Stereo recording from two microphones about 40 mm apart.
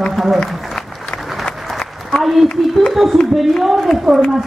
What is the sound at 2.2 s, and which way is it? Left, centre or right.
A woman's voice, centre.